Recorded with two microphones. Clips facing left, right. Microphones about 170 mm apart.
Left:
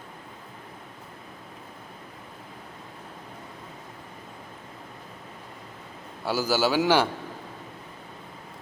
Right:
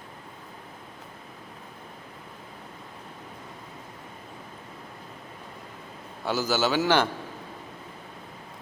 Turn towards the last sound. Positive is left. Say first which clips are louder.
# left 1 dB
turn(degrees=10)  # may be behind; listen again after turning